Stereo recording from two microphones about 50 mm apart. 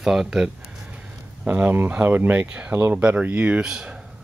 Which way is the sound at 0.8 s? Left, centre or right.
Right.